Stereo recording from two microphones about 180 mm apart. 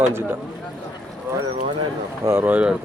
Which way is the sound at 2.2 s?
10° right (ahead or behind).